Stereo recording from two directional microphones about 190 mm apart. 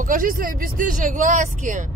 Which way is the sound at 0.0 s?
45° right (ahead or behind).